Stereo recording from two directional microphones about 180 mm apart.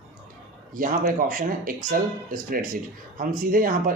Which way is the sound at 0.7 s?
50° right (ahead or behind).